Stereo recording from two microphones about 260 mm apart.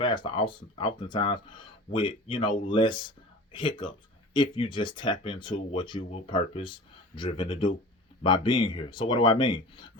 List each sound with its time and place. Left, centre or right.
0.0 s speech: centre